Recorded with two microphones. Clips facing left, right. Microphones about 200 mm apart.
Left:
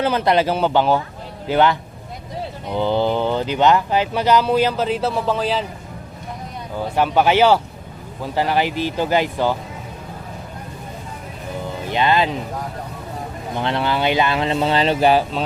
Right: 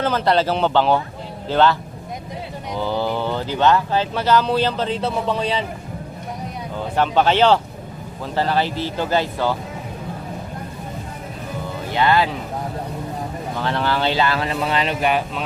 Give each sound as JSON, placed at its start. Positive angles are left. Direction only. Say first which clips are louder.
{"t": 0.0, "sound": "speech", "louder": "left 1 dB", "side_deg": 15}
{"t": 2.7, "sound": "speech", "louder": "left 4 dB", "side_deg": 20}
{"t": 6.9, "sound": "speech", "louder": "left 1 dB", "side_deg": 10}
{"t": 11.9, "sound": "speech", "louder": "even", "side_deg": 20}
{"t": 13.6, "sound": "speech", "louder": "left 1 dB", "side_deg": 20}